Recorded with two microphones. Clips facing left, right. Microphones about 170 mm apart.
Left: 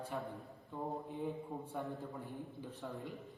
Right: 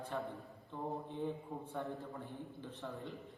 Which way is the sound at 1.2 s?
10° left (ahead or behind).